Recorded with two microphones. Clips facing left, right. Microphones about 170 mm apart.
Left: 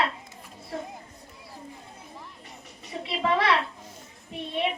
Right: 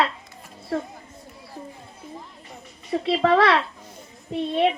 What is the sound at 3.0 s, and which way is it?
Speech, 65° right (ahead or behind).